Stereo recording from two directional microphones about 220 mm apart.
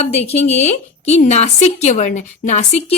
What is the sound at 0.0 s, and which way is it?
A woman's voice, 30° left (ahead or behind).